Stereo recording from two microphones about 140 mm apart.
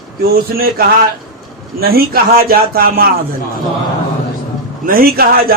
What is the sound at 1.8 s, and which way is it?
Speech, 90° right.